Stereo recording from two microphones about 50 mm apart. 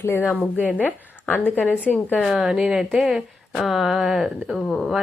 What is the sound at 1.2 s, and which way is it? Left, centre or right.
Speech, left.